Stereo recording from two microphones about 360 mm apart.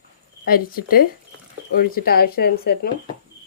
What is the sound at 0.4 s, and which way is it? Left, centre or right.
Speech, left.